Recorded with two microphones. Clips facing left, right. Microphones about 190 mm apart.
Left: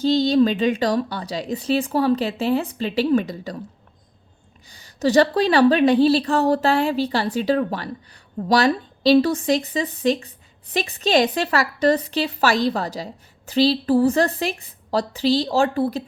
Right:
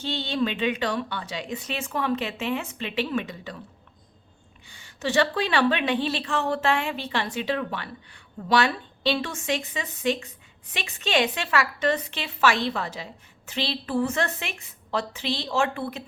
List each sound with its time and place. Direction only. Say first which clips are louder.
0.0 s a woman's voice: left 10 dB; 40° left (ahead or behind)
4.7 s a woman's voice: left 8 dB; 40° left (ahead or behind)